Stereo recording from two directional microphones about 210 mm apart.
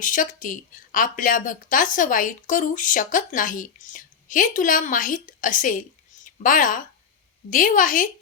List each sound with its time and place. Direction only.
0.0 s a woman's voice: 40° left (ahead or behind)